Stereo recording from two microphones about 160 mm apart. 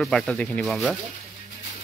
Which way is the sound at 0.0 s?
5° left (ahead or behind).